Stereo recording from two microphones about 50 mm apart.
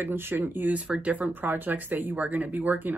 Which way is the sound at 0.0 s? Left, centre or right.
Right.